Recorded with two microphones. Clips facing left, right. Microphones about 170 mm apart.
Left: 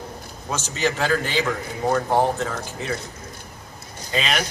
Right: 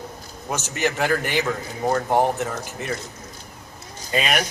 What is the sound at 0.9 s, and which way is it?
Speech, 15° right (ahead or behind).